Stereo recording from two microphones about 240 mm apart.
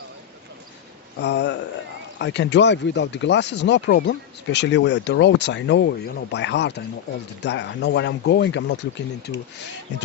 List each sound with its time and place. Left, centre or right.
1.2 s speech: left